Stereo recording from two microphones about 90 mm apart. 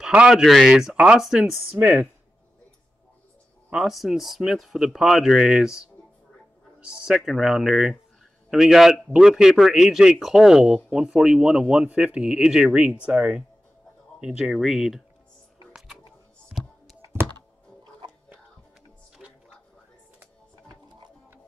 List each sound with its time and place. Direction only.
0.0 s speech: 10° right (ahead or behind)
1.7 s a man's voice: 15° right (ahead or behind)
3.7 s a man's voice: centre (ahead or behind)
16.4 s music: centre (ahead or behind)